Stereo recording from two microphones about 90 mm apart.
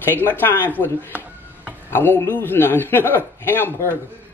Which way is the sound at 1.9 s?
25° left (ahead or behind).